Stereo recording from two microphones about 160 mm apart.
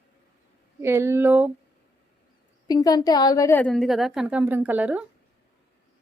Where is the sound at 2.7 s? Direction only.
25° left (ahead or behind).